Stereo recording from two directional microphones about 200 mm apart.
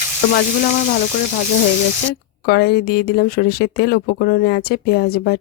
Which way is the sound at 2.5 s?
50° left (ahead or behind).